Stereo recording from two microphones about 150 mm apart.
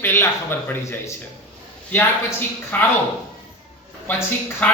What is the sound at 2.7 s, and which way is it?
Speech, 15° left (ahead or behind).